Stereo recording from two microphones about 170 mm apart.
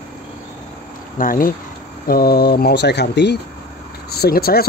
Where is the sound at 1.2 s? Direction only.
55° left (ahead or behind); by 3.4 s 80° left.